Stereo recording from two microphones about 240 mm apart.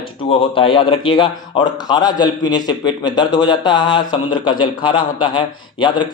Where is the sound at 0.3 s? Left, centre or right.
Left.